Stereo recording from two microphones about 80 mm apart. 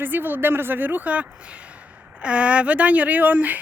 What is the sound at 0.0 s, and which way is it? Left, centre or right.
Speech, right.